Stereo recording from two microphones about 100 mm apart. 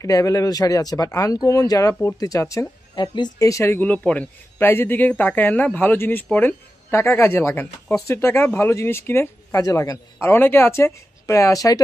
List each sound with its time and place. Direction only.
0.0 s speech: 35° left (ahead or behind)
3.0 s speech: 45° left (ahead or behind)
3.4 s a man's voice: 30° left (ahead or behind)
3.9 s a man's voice: 15° left (ahead or behind)
9.6 s speech: 35° left (ahead or behind)
10.2 s a man's voice: 25° left (ahead or behind)